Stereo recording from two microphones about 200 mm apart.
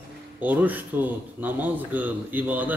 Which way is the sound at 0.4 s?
10° right (ahead or behind).